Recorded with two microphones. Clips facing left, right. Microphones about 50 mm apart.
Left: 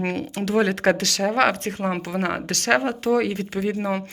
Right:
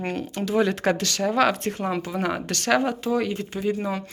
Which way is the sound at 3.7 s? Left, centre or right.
Left.